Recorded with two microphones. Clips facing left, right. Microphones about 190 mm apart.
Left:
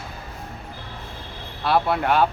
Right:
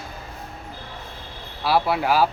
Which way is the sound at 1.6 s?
5° right (ahead or behind).